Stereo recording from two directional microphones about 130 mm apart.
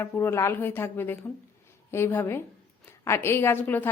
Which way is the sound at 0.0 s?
15° left (ahead or behind).